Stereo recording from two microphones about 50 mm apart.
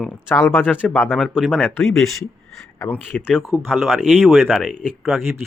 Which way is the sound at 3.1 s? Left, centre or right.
Left.